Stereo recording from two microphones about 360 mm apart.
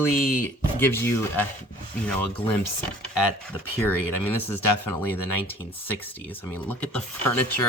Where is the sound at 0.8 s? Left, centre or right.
Centre.